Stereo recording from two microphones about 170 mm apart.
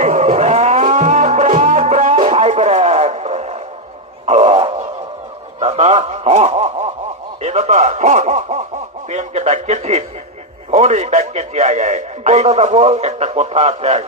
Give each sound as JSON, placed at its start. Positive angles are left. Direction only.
{"t": 0.0, "sound": "music", "side_deg": -45}
{"t": 4.3, "sound": "a sound", "side_deg": -35}
{"t": 10.7, "sound": "radio", "side_deg": -40}